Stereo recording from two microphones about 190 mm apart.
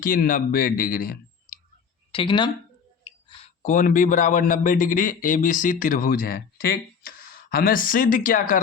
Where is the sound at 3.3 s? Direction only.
40° left (ahead or behind).